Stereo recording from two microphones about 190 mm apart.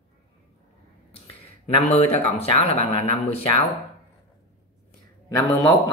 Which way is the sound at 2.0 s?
35° left (ahead or behind).